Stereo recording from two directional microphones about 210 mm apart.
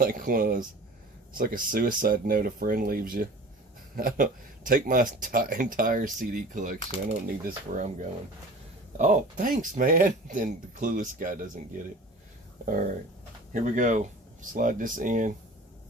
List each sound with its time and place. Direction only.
0.0 s speech: 45° right (ahead or behind)
9.0 s speech: 35° right (ahead or behind)
12.6 s speech: 40° right (ahead or behind)